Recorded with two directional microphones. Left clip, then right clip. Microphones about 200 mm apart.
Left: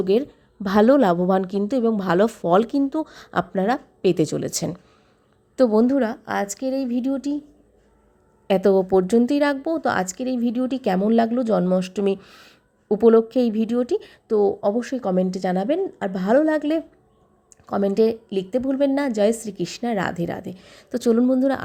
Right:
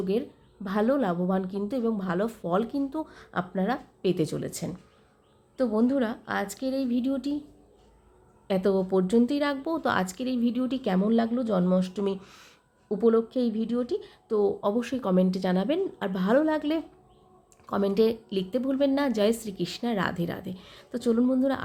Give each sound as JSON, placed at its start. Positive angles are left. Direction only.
{"t": 0.0, "sound": "a woman's voice", "side_deg": 40}
{"t": 8.4, "sound": "speech", "side_deg": 30}
{"t": 12.9, "sound": "speech", "side_deg": 35}